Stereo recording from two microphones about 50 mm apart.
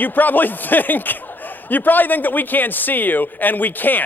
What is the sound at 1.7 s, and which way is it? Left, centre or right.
A man's voice, left.